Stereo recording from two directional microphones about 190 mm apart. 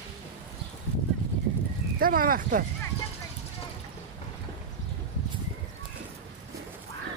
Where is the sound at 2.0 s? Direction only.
50° right (ahead or behind).